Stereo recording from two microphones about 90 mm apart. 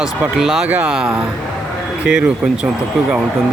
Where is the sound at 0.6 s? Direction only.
15° right (ahead or behind).